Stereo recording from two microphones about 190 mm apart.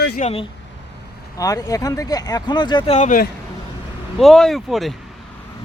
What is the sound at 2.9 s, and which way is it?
Speech, 45° left (ahead or behind).